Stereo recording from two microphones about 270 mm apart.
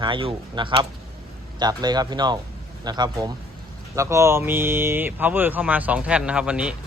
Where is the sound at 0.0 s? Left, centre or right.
Centre.